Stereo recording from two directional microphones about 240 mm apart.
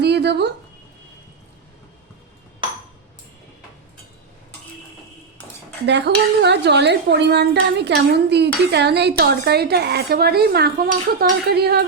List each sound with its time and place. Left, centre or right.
0.0 s a sound: right
5.8 s a woman's voice: right
11.2 s dishes: right